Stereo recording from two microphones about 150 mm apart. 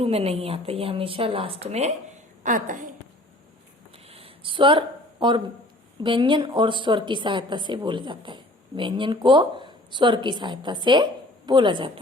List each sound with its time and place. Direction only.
0.0 s a woman's voice: 40° right (ahead or behind)
2.4 s a woman's voice: 60° right (ahead or behind)
3.9 s a sound: 40° right (ahead or behind)
6.0 s a woman's voice: 35° right (ahead or behind)